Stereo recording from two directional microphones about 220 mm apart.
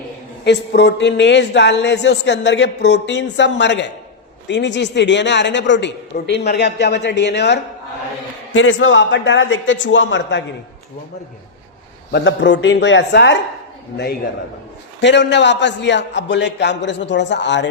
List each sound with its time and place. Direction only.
0.4 s a man's voice: 50° left (ahead or behind)
12.1 s speech: 55° left (ahead or behind)
15.0 s speech: 55° left (ahead or behind)